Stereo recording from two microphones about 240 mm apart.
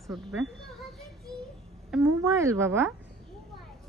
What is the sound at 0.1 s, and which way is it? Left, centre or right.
Speech, centre.